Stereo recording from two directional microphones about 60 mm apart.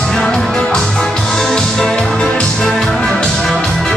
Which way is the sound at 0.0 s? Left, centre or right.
Centre.